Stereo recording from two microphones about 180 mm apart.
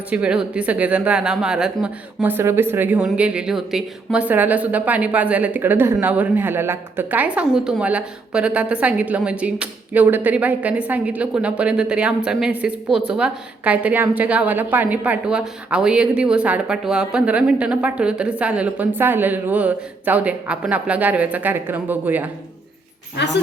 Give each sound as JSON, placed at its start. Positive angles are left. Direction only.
{"t": 0.1, "sound": "speech", "side_deg": -5}
{"t": 23.1, "sound": "a woman's voice", "side_deg": 75}